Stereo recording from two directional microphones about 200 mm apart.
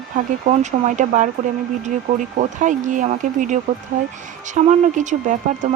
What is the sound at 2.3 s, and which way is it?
Speech, 40° right (ahead or behind).